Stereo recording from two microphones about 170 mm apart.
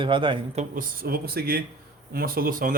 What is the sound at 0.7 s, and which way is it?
Speech, 55° right (ahead or behind).